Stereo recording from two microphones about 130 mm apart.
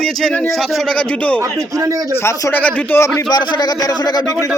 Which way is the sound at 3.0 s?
30° left (ahead or behind).